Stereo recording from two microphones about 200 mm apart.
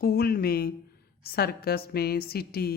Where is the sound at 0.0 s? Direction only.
50° left (ahead or behind).